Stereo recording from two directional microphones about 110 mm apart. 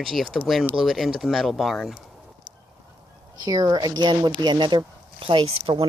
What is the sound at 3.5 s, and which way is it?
Speech, 35° right (ahead or behind).